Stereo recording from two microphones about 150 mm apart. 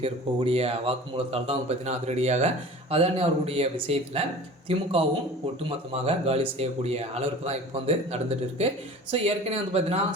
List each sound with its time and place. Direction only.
0.0 s speech: 40° right (ahead or behind)